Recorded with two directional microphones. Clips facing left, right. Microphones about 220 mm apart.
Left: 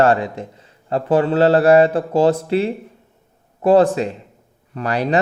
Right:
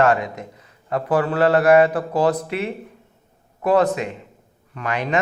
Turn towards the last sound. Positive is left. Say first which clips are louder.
# left 4 dB
turn(degrees=35)  # may be behind; listen again after turning